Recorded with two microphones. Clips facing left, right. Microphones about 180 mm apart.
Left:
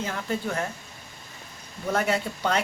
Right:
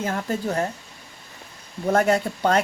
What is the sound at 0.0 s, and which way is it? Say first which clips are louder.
Speech: right 4 dB; 45° right (ahead or behind).